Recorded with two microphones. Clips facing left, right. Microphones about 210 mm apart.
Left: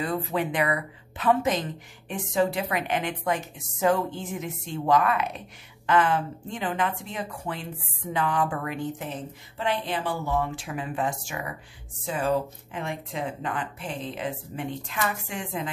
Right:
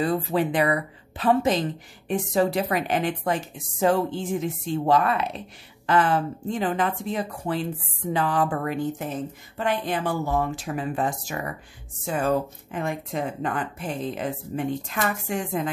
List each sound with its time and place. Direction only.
0.0 s a woman's voice: 35° right (ahead or behind)
9.6 s a woman's voice: 50° right (ahead or behind)